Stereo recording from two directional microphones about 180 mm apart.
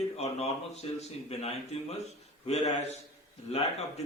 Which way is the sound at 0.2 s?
35° left (ahead or behind).